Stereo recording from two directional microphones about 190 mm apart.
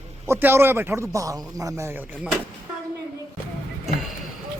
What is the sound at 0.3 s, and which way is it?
Speech, 10° right (ahead or behind).